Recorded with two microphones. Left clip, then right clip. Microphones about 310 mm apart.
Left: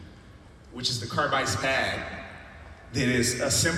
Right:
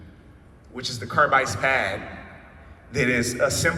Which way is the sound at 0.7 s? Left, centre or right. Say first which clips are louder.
Right 4 dB; right.